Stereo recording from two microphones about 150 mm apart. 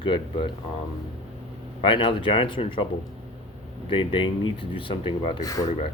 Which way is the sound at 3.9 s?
35° left (ahead or behind).